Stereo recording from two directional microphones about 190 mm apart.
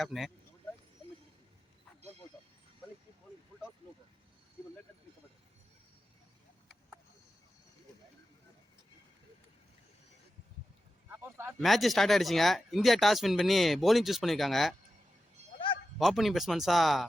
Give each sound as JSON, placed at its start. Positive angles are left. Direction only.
{"t": 0.0, "sound": "speech", "side_deg": 0}
{"t": 11.1, "sound": "speech", "side_deg": -10}
{"t": 11.6, "sound": "speech", "side_deg": 0}
{"t": 15.5, "sound": "a sound", "side_deg": 25}
{"t": 16.0, "sound": "speech", "side_deg": 0}